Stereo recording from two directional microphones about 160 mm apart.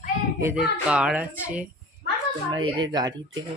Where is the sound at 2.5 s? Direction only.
25° right (ahead or behind).